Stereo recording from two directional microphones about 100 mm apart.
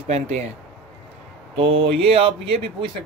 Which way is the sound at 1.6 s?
65° right (ahead or behind).